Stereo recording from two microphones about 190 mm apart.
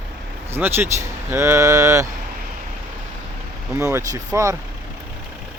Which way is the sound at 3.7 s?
15° right (ahead or behind).